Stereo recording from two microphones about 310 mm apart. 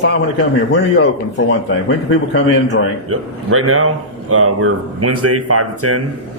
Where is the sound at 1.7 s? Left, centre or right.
Left.